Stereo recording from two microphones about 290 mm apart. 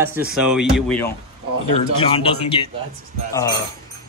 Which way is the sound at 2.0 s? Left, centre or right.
Centre.